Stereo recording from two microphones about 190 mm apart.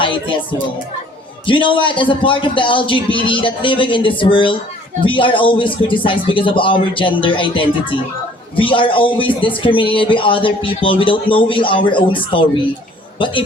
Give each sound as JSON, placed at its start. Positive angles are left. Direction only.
{"t": 0.0, "sound": "music", "side_deg": 25}
{"t": 1.5, "sound": "a man's voice", "side_deg": 25}